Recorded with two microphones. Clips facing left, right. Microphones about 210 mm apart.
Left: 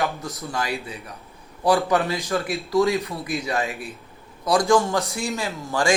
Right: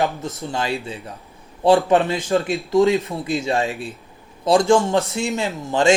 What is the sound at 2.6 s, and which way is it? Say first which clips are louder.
Speech: right 2 dB; 15° right (ahead or behind).